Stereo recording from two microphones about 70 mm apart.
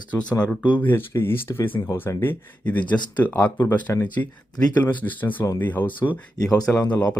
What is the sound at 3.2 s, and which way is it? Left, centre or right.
Speech, left.